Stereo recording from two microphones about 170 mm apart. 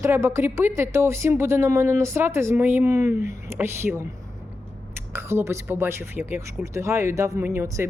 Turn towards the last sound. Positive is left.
turn(degrees=-15)  # may be behind; listen again after turning